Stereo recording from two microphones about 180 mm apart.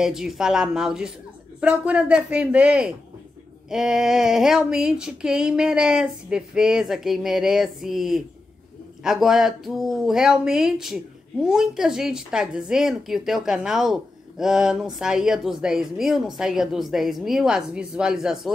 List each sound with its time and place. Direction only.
0.0 s speech: centre (ahead or behind)